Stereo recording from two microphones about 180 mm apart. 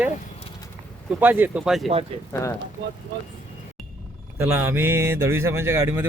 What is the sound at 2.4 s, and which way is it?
Speech, 15° left (ahead or behind).